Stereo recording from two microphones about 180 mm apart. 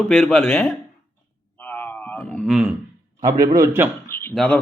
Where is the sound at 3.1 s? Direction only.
20° right (ahead or behind).